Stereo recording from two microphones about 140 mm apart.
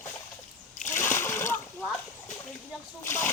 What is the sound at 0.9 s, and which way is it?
Splash, 15° left (ahead or behind).